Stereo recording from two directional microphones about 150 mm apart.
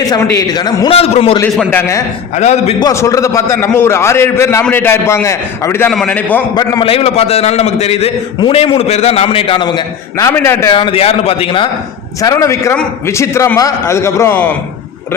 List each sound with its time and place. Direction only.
0.1 s a man's voice: 25° left (ahead or behind)
0.9 s a man's voice: 40° left (ahead or behind)
1.7 s a man's voice: 20° left (ahead or behind)
2.3 s a man's voice: 50° left (ahead or behind)
2.8 s a man's voice: 20° left (ahead or behind)
5.9 s a man's voice: 5° left (ahead or behind)
6.5 s a man's voice: 25° left (ahead or behind)
6.8 s a man's voice: 40° left (ahead or behind); by 10.8 s 20° left (ahead or behind)
10.8 s a man's voice: 35° left (ahead or behind)
12.2 s a man's voice: 20° left (ahead or behind)